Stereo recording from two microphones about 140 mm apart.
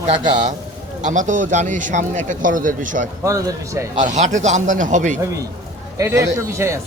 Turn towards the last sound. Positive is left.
turn(degrees=-20)  # may be behind; listen again after turning